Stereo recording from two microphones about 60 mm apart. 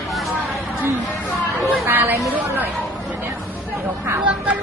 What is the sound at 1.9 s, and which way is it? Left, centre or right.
Speech, right.